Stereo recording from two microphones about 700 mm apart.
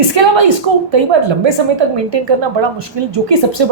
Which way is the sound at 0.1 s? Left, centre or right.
Right.